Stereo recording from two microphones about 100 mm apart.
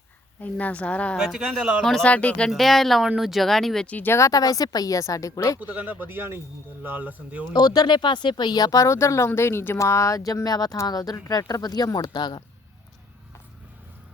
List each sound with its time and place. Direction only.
0.4 s speech: 15° left (ahead or behind)
1.2 s speech: 5° right (ahead or behind)
2.0 s speech: 15° left (ahead or behind)
2.5 s speech: centre (ahead or behind)
3.8 s speech: 20° left (ahead or behind)
4.2 s speech: 40° left (ahead or behind)
5.5 s speech: 15° right (ahead or behind)
7.5 s speech: 45° left (ahead or behind)